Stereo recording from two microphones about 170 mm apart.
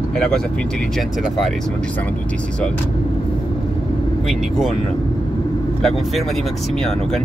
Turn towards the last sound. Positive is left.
turn(degrees=0)  # may be behind; listen again after turning